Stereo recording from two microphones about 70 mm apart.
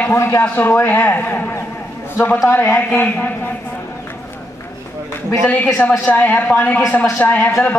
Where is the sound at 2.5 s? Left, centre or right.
Left.